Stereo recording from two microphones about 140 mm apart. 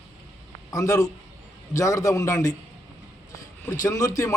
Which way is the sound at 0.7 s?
25° left (ahead or behind).